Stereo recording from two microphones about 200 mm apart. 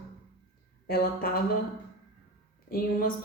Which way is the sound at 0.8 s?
50° left (ahead or behind).